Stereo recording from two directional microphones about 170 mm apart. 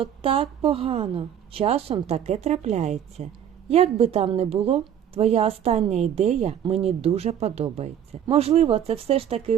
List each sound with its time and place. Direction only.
0.0 s a woman's voice: 35° right (ahead or behind)